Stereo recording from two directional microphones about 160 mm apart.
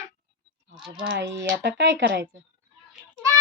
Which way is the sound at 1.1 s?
90° right.